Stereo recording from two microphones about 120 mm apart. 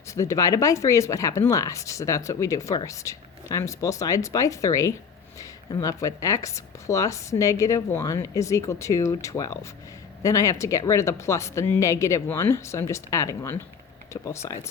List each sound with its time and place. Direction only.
0.1 s speech: 25° left (ahead or behind)